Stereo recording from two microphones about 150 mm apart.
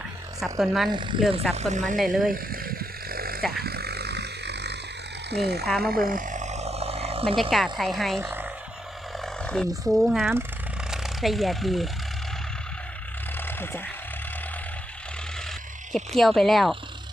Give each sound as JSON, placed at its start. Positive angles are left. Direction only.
{"t": 0.6, "sound": "speech", "side_deg": 0}
{"t": 0.9, "sound": "speech", "side_deg": -30}
{"t": 1.5, "sound": "speech", "side_deg": -55}
{"t": 2.0, "sound": "speech", "side_deg": 0}
{"t": 2.3, "sound": "a sound", "side_deg": -80}
{"t": 5.3, "sound": "speech", "side_deg": -90}
{"t": 5.6, "sound": "speech", "side_deg": 5}
{"t": 5.9, "sound": "vehicle", "side_deg": -70}
{"t": 7.5, "sound": "speech", "side_deg": 0}
{"t": 8.2, "sound": "a sound", "side_deg": -15}
{"t": 9.1, "sound": "speech", "side_deg": 5}
{"t": 13.6, "sound": "speech", "side_deg": 15}
{"t": 15.9, "sound": "speech", "side_deg": 0}